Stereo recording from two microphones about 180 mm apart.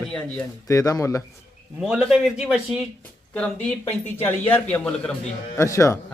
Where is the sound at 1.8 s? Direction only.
5° right (ahead or behind).